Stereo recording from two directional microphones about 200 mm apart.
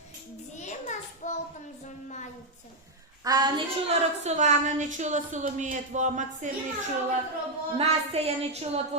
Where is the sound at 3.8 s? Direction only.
35° right (ahead or behind).